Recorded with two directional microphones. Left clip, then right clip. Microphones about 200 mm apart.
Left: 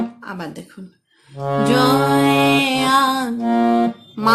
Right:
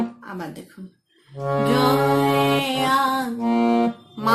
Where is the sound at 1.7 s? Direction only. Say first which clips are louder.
Left 4 dB; 35° left (ahead or behind).